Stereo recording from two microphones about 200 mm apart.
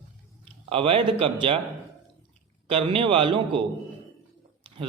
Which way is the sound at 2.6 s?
25° right (ahead or behind).